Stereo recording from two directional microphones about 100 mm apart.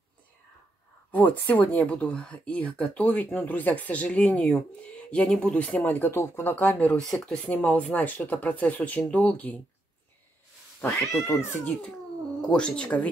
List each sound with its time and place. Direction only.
1.1 s speech: 15° left (ahead or behind)
5.8 s speech: 20° left (ahead or behind)
7.0 s speech: 5° left (ahead or behind)
7.4 s speech: 15° left (ahead or behind)
11.2 s speech: 25° left (ahead or behind)
12.4 s speech: 10° left (ahead or behind)